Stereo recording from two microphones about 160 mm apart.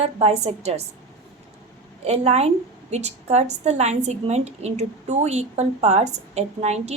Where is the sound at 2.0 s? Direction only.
40° right (ahead or behind).